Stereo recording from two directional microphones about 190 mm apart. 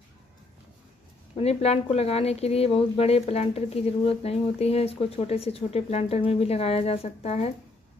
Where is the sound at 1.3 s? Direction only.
35° left (ahead or behind).